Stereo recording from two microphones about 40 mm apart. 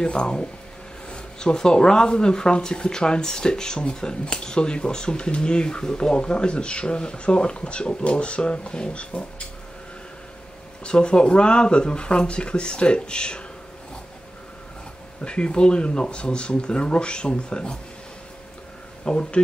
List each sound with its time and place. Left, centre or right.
0.0 s speech: left
10.8 s speech: left
15.2 s speech: left
19.0 s speech: left